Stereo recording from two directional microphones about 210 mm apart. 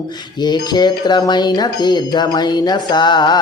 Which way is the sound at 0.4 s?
20° left (ahead or behind).